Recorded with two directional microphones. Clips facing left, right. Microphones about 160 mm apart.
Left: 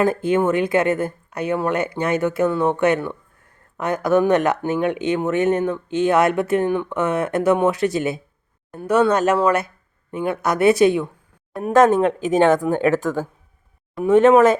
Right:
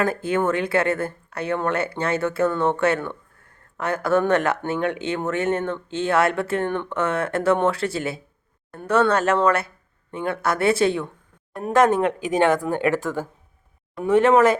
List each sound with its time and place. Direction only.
0.0 s speech: 20° left (ahead or behind)